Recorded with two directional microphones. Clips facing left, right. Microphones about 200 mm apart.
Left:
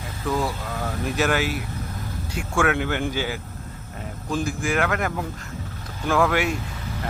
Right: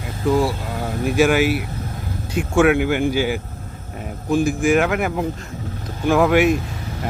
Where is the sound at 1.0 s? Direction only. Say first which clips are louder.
Right 7 dB; 10° right (ahead or behind).